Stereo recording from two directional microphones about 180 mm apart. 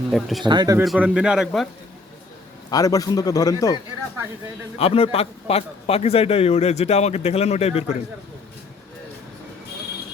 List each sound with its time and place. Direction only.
0.1 s a man's voice: centre (ahead or behind)
0.4 s speech: 25° right (ahead or behind)
0.9 s a man's voice: 5° right (ahead or behind)
2.6 s a man's voice: 20° left (ahead or behind)
4.8 s a man's voice: 35° left (ahead or behind)